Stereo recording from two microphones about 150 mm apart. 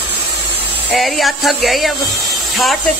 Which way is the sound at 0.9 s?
Centre (ahead or behind).